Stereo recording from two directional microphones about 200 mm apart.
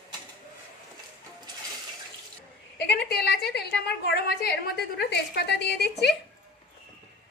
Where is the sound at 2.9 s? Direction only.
55° left (ahead or behind).